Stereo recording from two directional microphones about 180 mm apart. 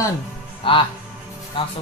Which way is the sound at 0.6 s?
30° left (ahead or behind).